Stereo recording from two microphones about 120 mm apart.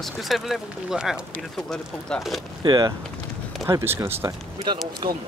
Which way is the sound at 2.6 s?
35° right (ahead or behind).